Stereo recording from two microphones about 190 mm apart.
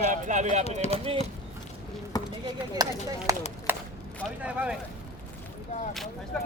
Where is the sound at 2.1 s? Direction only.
20° left (ahead or behind).